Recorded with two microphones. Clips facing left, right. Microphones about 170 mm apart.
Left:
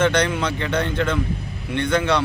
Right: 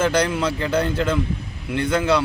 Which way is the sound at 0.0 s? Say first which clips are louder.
Even; 5° right (ahead or behind).